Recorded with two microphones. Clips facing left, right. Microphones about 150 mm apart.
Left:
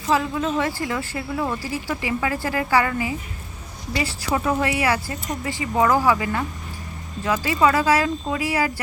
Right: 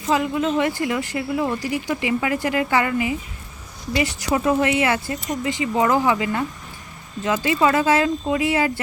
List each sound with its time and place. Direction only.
0.1 s speech: 20° right (ahead or behind)
7.3 s speech: 20° right (ahead or behind)